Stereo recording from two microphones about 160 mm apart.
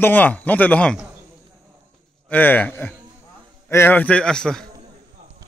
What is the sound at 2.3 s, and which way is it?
Speech, 10° left (ahead or behind).